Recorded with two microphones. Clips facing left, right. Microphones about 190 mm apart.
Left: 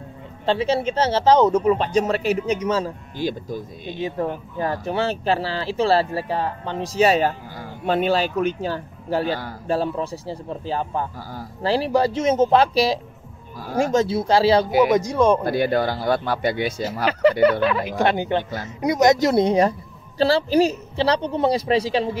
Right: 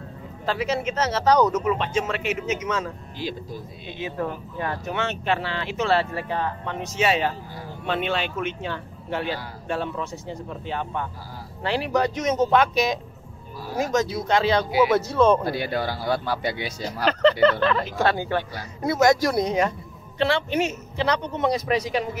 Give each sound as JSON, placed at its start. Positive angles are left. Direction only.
{"t": 0.5, "sound": "speech", "side_deg": 30}
{"t": 14.9, "sound": "speech", "side_deg": 15}
{"t": 15.4, "sound": "speech", "side_deg": 50}
{"t": 17.0, "sound": "speech", "side_deg": 10}